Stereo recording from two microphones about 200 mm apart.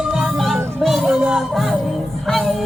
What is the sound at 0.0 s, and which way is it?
Music, 5° right (ahead or behind).